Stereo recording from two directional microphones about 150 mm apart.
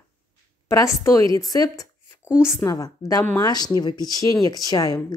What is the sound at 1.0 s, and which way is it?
Speech, 20° left (ahead or behind).